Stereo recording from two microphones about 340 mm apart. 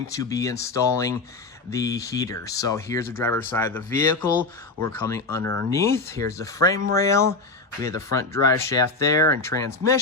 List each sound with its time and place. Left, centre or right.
0.1 s speech: centre